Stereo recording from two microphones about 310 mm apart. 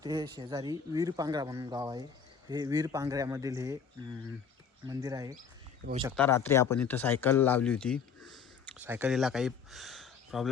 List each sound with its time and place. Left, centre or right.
0.0 s speech: centre
5.8 s speech: right
6.1 s speech: centre
8.3 s a sound: centre